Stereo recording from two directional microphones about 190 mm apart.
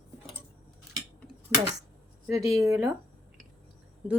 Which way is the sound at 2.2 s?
15° right (ahead or behind).